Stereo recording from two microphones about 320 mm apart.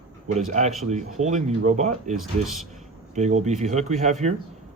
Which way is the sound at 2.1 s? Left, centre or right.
Centre.